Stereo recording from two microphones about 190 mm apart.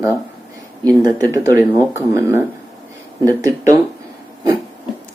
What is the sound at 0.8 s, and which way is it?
Speech, 20° right (ahead or behind).